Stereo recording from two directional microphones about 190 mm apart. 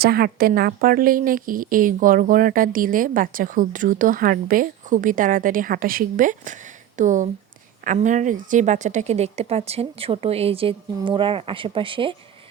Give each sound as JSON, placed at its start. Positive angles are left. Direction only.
{"t": 0.0, "sound": "a woman's voice", "side_deg": -55}